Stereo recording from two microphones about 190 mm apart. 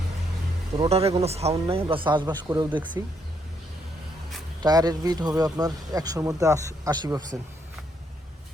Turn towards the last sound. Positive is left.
turn(degrees=-20)  # may be behind; listen again after turning